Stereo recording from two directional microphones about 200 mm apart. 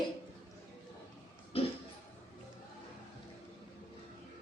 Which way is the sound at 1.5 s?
30° left (ahead or behind).